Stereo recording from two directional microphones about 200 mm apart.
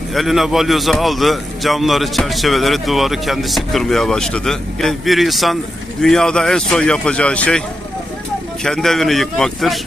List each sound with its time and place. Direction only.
0.1 s a man's voice: centre (ahead or behind)
8.6 s a man's voice: centre (ahead or behind)